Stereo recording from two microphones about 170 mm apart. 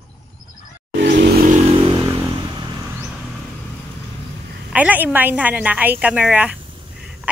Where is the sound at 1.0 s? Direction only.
90° right.